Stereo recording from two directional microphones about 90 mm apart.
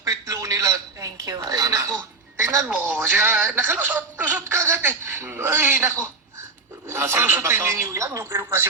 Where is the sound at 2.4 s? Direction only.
25° right (ahead or behind).